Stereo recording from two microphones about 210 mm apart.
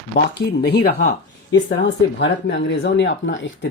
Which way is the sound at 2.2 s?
55° left (ahead or behind).